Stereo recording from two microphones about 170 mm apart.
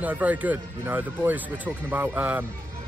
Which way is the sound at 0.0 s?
10° right (ahead or behind).